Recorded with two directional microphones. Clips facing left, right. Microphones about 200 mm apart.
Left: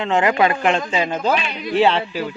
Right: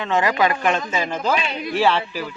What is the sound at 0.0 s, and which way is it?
Speech, 25° left (ahead or behind).